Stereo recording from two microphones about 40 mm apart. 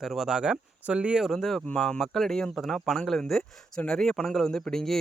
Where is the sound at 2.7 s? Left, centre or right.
Centre.